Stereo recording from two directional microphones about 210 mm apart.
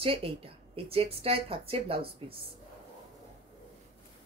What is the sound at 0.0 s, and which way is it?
Speech, 25° right (ahead or behind).